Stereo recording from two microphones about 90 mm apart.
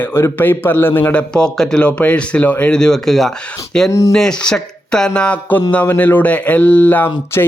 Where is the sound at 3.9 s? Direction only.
35° left (ahead or behind).